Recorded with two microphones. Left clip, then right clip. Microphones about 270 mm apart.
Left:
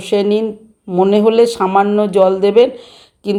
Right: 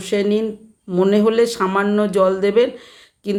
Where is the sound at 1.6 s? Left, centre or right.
Centre.